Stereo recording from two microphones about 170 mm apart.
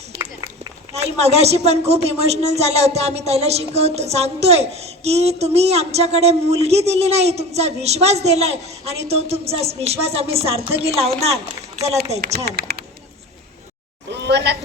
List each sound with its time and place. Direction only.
0.2 s run: 25° right (ahead or behind)
0.9 s speech: 40° right (ahead or behind)
12.1 s speech: 40° right (ahead or behind)
12.5 s speech: 65° right (ahead or behind)
14.1 s a sound: 90° right